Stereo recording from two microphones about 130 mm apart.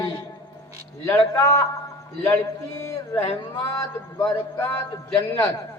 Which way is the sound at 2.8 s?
20° left (ahead or behind).